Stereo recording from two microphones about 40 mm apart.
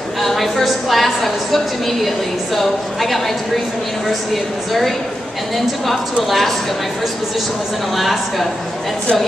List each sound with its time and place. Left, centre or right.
0.2 s a woman's voice: centre
7.9 s a woman's voice: centre